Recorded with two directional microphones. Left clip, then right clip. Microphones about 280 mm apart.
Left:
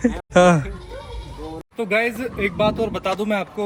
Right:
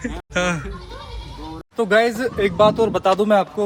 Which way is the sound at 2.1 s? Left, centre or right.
Centre.